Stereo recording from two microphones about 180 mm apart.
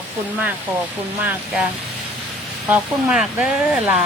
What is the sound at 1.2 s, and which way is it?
Speech, 10° right (ahead or behind).